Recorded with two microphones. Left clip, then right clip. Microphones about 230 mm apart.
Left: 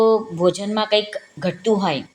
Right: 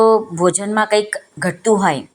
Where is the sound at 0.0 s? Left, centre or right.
Centre.